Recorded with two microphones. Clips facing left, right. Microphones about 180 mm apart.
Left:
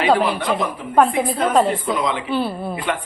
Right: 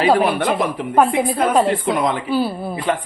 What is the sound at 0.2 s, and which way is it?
Speech, 50° right (ahead or behind).